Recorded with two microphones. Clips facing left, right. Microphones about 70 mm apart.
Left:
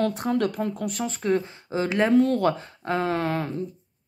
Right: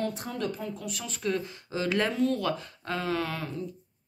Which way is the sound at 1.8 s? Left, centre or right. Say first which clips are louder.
Left 4 dB; centre.